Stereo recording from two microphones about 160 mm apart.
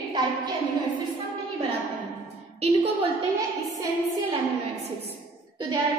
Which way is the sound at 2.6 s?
40° right (ahead or behind).